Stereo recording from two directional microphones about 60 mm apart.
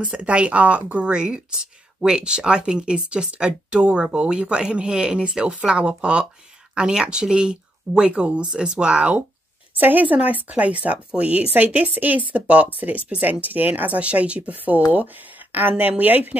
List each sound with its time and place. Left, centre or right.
0.0 s speech: right
9.8 s speech: right
15.8 s speech: right